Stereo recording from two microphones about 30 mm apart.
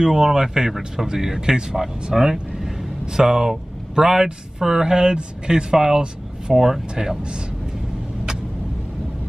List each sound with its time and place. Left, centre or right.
0.1 s speech: centre